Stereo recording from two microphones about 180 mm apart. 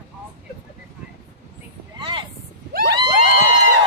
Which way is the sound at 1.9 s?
25° right (ahead or behind).